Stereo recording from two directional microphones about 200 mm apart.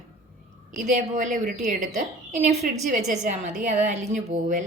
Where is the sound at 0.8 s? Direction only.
40° right (ahead or behind).